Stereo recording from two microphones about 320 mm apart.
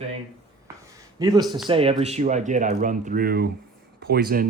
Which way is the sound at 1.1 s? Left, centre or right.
Centre.